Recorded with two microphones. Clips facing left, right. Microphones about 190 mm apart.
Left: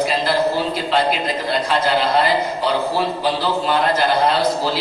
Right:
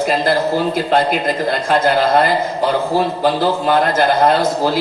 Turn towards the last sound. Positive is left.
turn(degrees=-50)  # may be behind; listen again after turning